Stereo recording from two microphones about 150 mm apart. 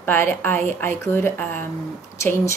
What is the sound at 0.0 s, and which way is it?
A woman's voice, 15° left (ahead or behind).